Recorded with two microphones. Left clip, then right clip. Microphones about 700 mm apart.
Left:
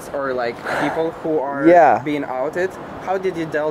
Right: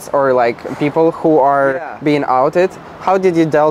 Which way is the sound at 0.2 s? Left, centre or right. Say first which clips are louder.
Right 9 dB; right.